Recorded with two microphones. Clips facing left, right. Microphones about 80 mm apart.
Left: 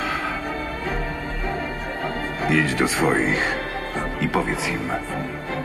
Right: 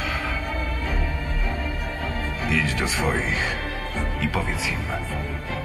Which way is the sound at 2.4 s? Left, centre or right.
Left.